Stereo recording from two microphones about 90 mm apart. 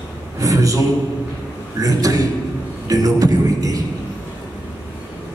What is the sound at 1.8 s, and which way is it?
Speech, 40° right (ahead or behind).